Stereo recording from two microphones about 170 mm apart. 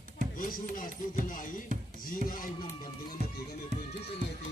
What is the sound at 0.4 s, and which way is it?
Speech, 55° left (ahead or behind).